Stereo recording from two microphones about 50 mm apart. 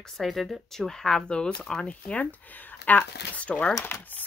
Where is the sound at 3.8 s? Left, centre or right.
Left.